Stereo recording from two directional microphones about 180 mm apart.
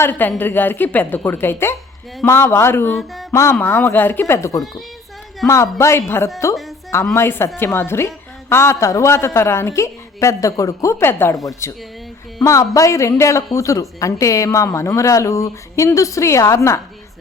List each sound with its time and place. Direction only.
0.0 s speech: 10° left (ahead or behind)
2.9 s speech: centre (ahead or behind)
3.3 s speech: 15° left (ahead or behind)
5.7 s speech: 15° left (ahead or behind)